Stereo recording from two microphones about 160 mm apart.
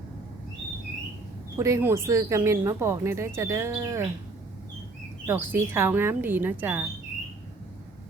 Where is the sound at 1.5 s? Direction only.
20° right (ahead or behind).